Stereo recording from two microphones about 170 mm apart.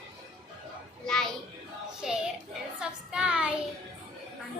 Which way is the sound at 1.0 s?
5° left (ahead or behind).